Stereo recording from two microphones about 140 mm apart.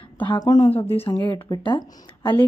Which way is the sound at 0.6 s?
45° left (ahead or behind).